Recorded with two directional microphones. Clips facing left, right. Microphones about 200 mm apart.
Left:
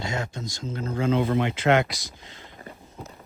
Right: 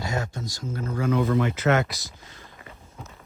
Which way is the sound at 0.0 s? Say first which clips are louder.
Right 1 dB; 20° left (ahead or behind).